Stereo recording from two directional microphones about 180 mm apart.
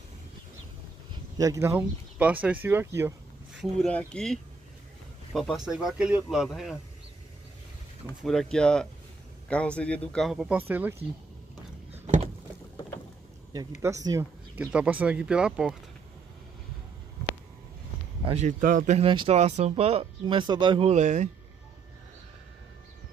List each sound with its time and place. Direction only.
1.4 s speech: 15° right (ahead or behind)
3.8 s speech: 5° left (ahead or behind)
8.2 s speech: centre (ahead or behind)
13.7 s speech: 15° right (ahead or behind)
18.2 s a sound: 35° right (ahead or behind)
18.6 s speech: 50° right (ahead or behind)
19.0 s speech: 30° right (ahead or behind)
20.9 s speech: 40° right (ahead or behind)